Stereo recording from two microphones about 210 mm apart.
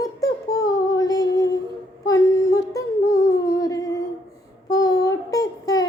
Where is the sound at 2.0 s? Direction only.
15° left (ahead or behind).